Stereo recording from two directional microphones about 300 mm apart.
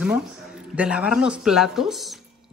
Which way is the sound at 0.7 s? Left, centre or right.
Centre.